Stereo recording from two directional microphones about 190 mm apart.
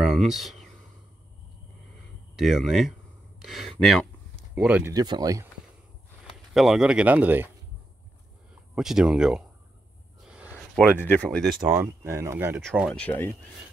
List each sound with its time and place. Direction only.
0.1 s speech: centre (ahead or behind)
2.3 s speech: centre (ahead or behind)
4.9 s speech: 20° right (ahead or behind)
6.5 s speech: centre (ahead or behind)
8.7 s speech: 5° right (ahead or behind)
10.2 s a sound: 5° right (ahead or behind)
10.8 s speech: 5° left (ahead or behind)
11.7 s speech: 15° right (ahead or behind)
12.6 s speech: centre (ahead or behind)